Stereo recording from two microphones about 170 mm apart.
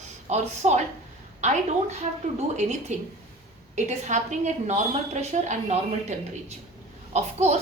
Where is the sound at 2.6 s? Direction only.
45° right (ahead or behind).